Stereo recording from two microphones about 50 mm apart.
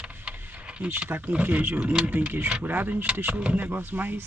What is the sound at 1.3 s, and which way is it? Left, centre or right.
Speech, right.